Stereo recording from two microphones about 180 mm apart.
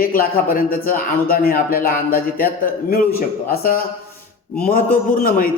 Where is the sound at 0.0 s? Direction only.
50° left (ahead or behind).